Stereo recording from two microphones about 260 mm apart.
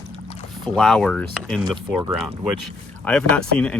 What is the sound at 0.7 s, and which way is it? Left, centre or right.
Speech, centre.